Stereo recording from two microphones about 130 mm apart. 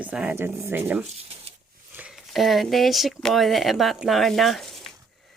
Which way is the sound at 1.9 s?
10° right (ahead or behind).